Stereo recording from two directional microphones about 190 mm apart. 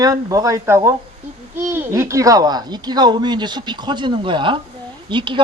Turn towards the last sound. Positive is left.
turn(degrees=-25)  # may be behind; listen again after turning